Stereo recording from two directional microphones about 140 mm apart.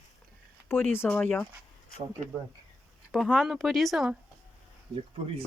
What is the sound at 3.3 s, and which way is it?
Speech, centre (ahead or behind).